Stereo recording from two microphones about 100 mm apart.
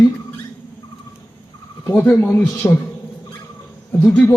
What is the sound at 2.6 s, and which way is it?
Music, 20° left (ahead or behind).